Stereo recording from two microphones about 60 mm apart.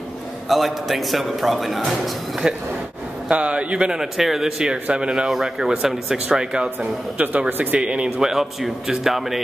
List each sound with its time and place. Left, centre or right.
0.5 s a man's voice: centre
3.3 s a man's voice: centre
7.4 s speech: right
7.8 s a man's voice: centre
8.3 s a man's voice: centre